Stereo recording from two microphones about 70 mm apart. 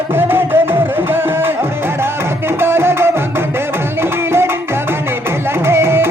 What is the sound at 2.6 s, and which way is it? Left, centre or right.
Music, right.